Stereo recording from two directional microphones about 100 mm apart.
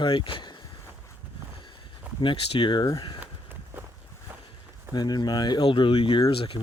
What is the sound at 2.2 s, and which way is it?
Speech, 55° left (ahead or behind).